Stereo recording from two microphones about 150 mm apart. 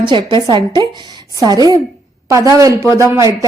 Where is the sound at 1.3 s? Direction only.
25° right (ahead or behind).